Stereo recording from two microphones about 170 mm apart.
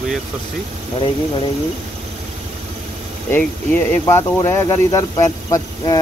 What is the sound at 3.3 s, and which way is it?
Speech, 10° left (ahead or behind).